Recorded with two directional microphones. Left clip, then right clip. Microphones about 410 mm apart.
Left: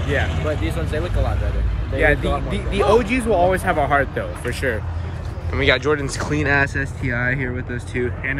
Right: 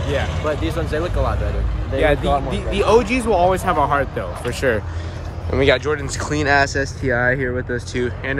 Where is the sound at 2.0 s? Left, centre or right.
Centre.